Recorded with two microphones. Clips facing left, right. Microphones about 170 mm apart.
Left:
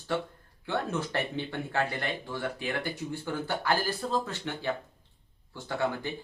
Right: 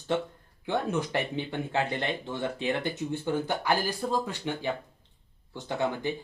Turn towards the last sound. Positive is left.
turn(degrees=-20)  # may be behind; listen again after turning